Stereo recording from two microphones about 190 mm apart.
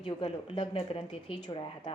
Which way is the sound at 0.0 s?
25° left (ahead or behind).